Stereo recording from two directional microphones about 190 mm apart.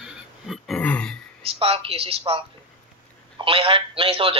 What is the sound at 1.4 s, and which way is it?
A man's voice, 30° right (ahead or behind).